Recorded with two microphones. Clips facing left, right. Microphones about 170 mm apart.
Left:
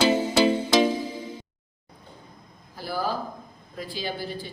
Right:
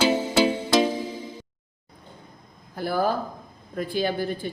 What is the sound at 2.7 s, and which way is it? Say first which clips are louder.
Speech: right 5 dB; 55° right (ahead or behind).